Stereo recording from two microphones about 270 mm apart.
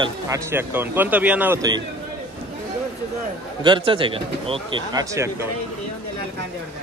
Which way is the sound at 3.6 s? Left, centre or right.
Centre.